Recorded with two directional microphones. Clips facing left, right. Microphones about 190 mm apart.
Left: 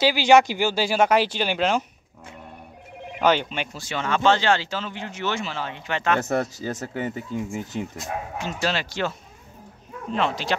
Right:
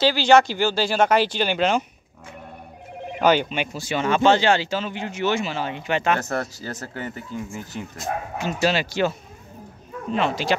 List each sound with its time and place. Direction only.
0.0 s speech: 10° left (ahead or behind)
3.2 s speech: 5° right (ahead or behind)
6.2 s speech: 15° left (ahead or behind)
8.4 s speech: 10° right (ahead or behind)
10.1 s speech: 5° right (ahead or behind)